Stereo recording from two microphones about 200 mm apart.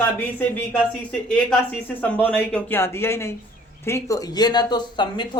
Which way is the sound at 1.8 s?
10° left (ahead or behind).